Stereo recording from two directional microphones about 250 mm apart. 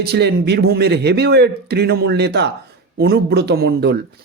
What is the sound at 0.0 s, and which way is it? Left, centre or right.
Speech, right.